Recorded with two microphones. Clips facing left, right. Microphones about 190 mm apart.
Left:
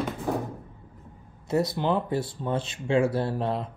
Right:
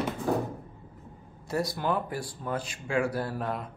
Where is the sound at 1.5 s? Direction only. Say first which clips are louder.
Left 4 dB; 25° left (ahead or behind).